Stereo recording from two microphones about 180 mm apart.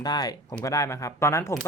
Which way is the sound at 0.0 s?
20° left (ahead or behind).